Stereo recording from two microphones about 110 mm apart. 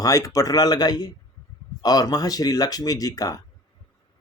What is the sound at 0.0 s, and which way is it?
A man's voice, 30° left (ahead or behind).